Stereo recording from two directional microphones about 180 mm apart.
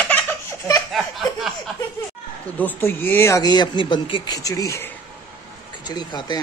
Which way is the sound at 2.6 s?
10° left (ahead or behind).